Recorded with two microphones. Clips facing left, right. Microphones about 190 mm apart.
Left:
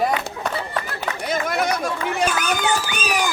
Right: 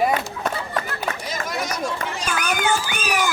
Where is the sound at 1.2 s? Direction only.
60° left (ahead or behind).